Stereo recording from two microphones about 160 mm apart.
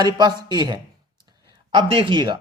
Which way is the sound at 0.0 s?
25° right (ahead or behind).